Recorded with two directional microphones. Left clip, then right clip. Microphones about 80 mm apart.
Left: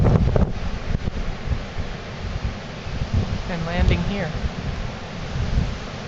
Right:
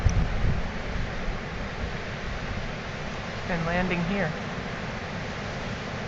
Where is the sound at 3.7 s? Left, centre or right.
Left.